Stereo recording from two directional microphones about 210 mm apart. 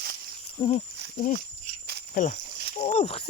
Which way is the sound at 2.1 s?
35° left (ahead or behind).